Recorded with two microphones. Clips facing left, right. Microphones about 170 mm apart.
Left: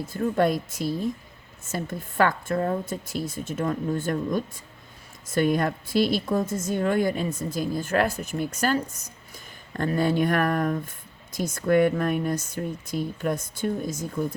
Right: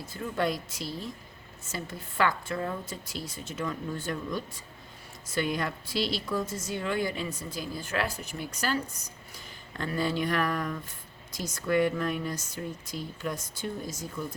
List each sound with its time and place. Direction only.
0.1 s a woman's voice: 50° left (ahead or behind)